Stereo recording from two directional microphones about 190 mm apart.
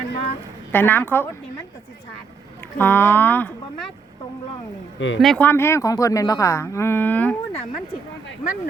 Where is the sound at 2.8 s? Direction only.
10° left (ahead or behind).